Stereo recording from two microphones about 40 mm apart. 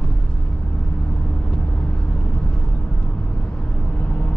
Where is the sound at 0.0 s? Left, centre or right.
Left.